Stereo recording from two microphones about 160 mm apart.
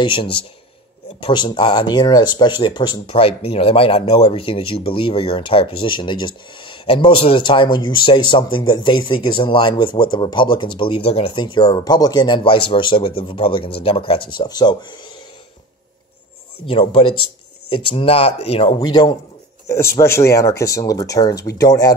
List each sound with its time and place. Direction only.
0.0 s speech: 30° left (ahead or behind)
16.6 s speech: 35° left (ahead or behind)
18.8 s speech: 25° left (ahead or behind)